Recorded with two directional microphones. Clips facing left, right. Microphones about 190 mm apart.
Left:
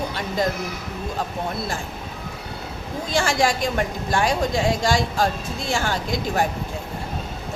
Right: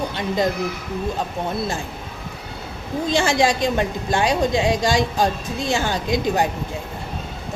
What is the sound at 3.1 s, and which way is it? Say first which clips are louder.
A woman's voice: right 2 dB; 20° right (ahead or behind).